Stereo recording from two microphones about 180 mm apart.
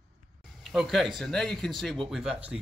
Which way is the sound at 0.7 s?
Centre (ahead or behind).